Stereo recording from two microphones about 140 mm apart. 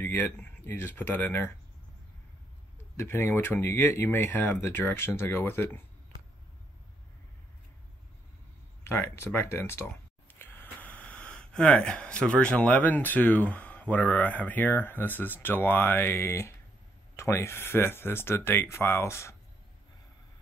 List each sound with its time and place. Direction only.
0.0 s speech: 15° left (ahead or behind)
3.0 s speech: 15° left (ahead or behind)
8.8 s speech: 20° left (ahead or behind)